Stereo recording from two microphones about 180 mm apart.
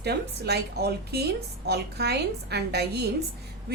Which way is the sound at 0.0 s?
65° right (ahead or behind).